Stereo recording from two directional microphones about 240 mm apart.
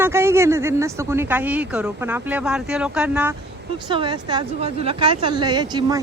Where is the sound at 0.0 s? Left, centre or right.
Centre.